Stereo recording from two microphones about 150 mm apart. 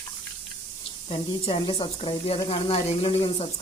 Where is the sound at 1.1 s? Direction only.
40° left (ahead or behind).